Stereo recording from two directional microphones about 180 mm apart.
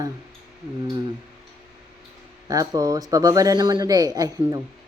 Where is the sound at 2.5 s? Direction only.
20° right (ahead or behind).